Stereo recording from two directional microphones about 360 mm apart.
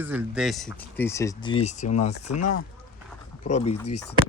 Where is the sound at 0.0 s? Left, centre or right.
Centre.